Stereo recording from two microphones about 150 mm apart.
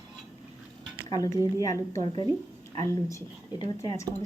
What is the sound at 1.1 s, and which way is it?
A woman's voice, 25° left (ahead or behind).